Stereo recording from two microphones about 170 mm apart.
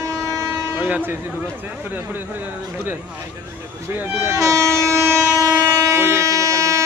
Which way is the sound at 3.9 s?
15° right (ahead or behind).